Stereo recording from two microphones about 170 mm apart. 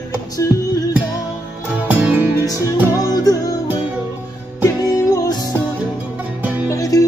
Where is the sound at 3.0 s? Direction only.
20° left (ahead or behind).